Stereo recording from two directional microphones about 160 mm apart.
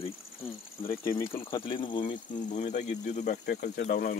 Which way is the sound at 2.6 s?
45° left (ahead or behind).